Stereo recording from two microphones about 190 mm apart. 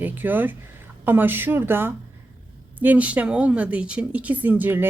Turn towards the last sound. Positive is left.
turn(degrees=-10)  # may be behind; listen again after turning